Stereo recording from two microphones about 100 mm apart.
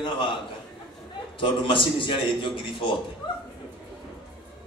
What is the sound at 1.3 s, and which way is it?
A man's voice, 60° left (ahead or behind).